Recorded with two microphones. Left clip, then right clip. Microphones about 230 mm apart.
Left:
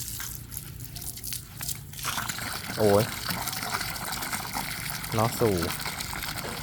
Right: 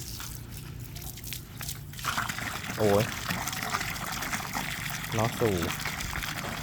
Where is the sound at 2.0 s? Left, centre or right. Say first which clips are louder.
Right 1 dB; centre.